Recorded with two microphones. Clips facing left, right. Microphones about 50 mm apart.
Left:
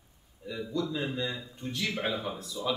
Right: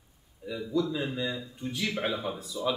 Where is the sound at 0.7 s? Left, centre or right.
Centre.